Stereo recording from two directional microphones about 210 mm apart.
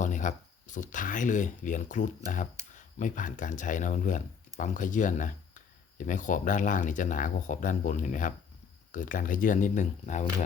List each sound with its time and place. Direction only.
0.0 s speech: 35° left (ahead or behind)